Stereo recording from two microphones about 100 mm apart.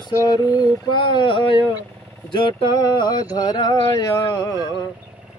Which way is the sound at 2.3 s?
55° left (ahead or behind).